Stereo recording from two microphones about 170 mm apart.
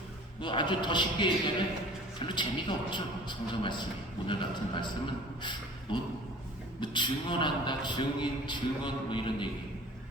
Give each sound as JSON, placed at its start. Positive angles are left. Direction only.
{"t": 0.4, "sound": "a man's voice", "side_deg": 25}